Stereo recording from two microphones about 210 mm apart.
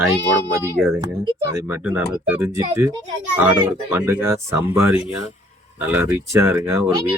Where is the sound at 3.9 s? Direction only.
10° right (ahead or behind).